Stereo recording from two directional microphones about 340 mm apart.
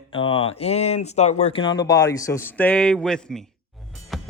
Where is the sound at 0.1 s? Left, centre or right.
Centre.